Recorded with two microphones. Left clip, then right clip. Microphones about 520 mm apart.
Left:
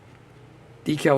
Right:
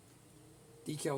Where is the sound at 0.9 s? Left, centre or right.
Right.